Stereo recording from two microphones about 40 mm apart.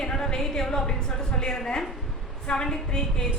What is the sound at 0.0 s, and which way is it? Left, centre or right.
A woman's voice, centre.